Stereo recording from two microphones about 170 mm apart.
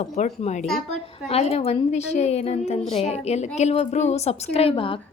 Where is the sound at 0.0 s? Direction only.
40° left (ahead or behind).